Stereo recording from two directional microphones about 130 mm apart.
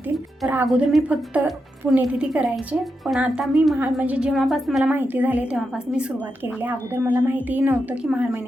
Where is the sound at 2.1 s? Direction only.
5° right (ahead or behind).